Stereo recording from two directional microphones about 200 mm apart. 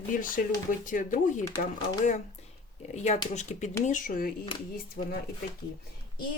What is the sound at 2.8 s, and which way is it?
Speech, 35° left (ahead or behind).